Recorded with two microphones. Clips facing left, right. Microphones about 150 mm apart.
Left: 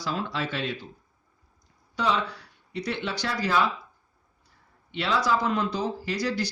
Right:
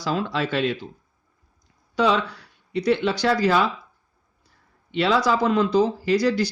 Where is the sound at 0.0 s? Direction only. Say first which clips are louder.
Right 5 dB; 90° right.